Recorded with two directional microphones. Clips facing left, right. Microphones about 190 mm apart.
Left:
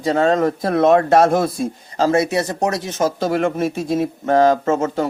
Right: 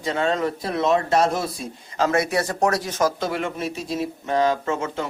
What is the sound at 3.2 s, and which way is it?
Speech, 45° left (ahead or behind).